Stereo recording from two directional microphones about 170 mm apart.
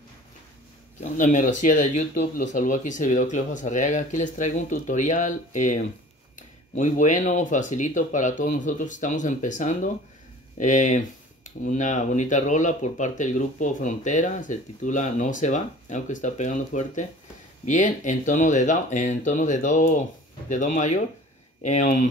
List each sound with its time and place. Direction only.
1.1 s speech: 50° left (ahead or behind)